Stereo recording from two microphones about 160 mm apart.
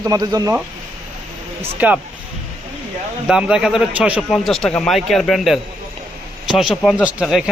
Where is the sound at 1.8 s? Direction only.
10° right (ahead or behind).